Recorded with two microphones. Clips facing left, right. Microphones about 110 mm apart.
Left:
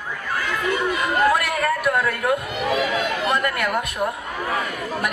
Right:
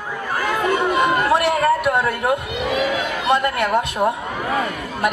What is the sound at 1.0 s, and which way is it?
Chatter, 25° right (ahead or behind).